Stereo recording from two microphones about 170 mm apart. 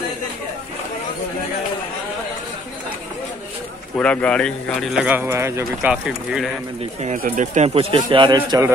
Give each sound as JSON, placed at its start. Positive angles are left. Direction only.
{"t": 3.9, "sound": "speech", "side_deg": 5}
{"t": 7.2, "sound": "speech", "side_deg": -50}